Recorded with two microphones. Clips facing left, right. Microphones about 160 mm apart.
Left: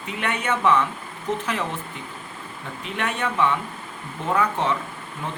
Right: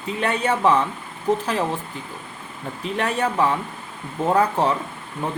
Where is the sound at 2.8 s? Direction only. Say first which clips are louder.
Right 4 dB; 35° right (ahead or behind).